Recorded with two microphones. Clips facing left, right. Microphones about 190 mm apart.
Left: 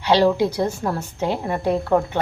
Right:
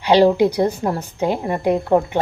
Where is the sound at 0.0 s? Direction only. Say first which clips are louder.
Right 4 dB; 15° right (ahead or behind).